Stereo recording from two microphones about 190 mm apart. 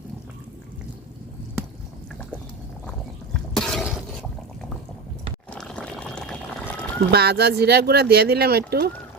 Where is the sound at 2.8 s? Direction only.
Centre (ahead or behind).